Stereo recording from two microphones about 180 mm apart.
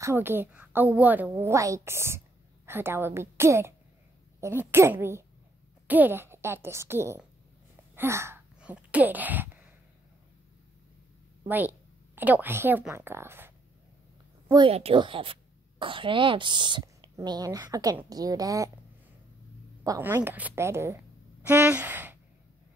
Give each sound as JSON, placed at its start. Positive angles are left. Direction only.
{"t": 0.0, "sound": "a woman's voice", "side_deg": -10}
{"t": 11.4, "sound": "a woman's voice", "side_deg": -10}
{"t": 14.5, "sound": "speech", "side_deg": -30}
{"t": 19.8, "sound": "a woman's voice", "side_deg": -15}